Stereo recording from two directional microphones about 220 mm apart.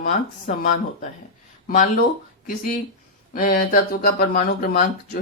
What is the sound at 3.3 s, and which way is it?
Speech, 40° left (ahead or behind).